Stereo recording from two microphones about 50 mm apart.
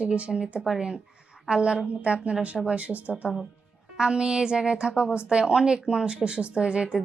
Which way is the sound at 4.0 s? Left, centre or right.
Centre.